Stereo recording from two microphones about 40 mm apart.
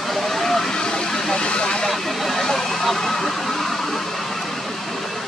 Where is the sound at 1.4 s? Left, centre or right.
Left.